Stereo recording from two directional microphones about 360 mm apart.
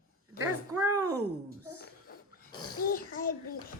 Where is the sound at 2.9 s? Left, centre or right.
Left.